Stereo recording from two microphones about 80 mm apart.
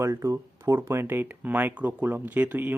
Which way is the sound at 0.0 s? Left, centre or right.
Right.